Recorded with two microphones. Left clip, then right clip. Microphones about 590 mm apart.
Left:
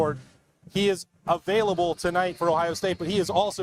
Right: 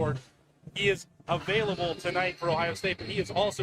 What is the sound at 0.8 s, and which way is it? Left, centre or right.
Speech, left.